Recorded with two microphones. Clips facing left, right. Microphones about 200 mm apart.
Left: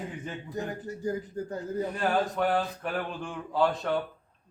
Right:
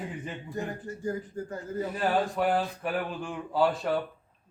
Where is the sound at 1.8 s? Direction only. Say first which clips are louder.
Right 1 dB; 5° right (ahead or behind).